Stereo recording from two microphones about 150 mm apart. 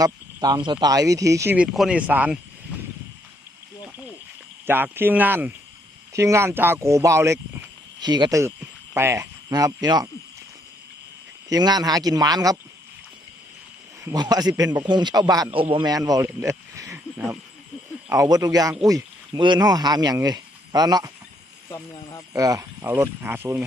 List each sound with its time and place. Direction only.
0.0 s speech: 25° right (ahead or behind)
1.5 s speech: centre (ahead or behind)
4.6 s speech: 15° right (ahead or behind)
8.0 s speech: 30° right (ahead or behind)
11.4 s speech: 25° right (ahead or behind)
14.0 s speech: 25° right (ahead or behind)
22.3 s speech: 20° right (ahead or behind)